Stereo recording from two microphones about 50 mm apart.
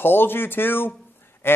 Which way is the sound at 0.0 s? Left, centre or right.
Left.